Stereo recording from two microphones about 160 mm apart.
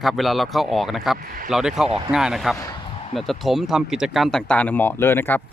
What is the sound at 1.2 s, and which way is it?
Speech, 60° right (ahead or behind).